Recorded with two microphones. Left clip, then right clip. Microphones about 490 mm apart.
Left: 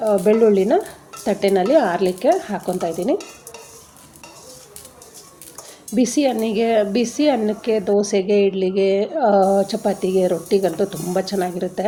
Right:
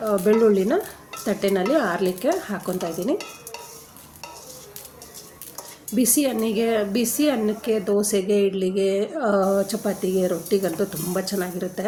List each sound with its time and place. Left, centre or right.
0.0 s speech: right
5.9 s speech: right